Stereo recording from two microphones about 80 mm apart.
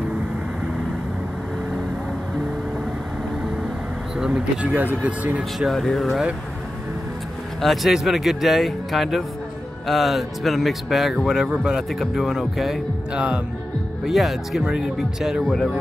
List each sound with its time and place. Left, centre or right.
4.2 s speech: centre
5.7 s speech: centre
7.6 s speech: centre
13.1 s speech: centre
14.0 s speech: centre